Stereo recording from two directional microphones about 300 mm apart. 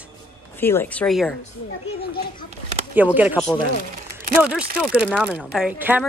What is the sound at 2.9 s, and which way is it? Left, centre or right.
Speech, centre.